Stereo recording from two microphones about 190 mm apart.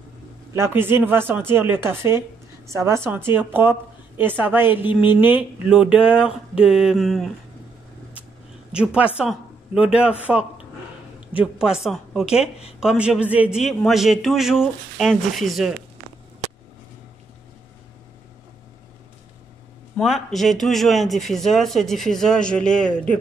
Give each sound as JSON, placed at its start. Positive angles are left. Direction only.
{"t": 0.5, "sound": "a man's voice", "side_deg": -10}
{"t": 8.7, "sound": "speech", "side_deg": -5}
{"t": 11.1, "sound": "speech", "side_deg": -5}
{"t": 12.4, "sound": "speech", "side_deg": 30}
{"t": 12.8, "sound": "a man's voice", "side_deg": -5}
{"t": 20.0, "sound": "a man's voice", "side_deg": 0}